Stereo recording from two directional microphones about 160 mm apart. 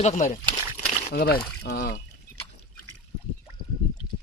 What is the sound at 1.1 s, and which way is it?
Speech, 75° left (ahead or behind).